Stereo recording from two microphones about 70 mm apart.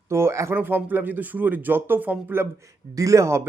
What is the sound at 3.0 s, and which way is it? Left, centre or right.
Speech, right.